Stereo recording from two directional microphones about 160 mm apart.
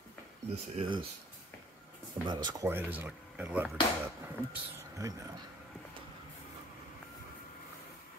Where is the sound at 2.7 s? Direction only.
10° right (ahead or behind).